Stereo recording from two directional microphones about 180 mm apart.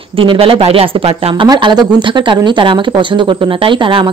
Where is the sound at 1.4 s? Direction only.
20° right (ahead or behind).